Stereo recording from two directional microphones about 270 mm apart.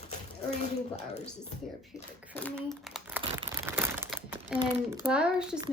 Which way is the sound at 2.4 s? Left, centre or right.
Centre.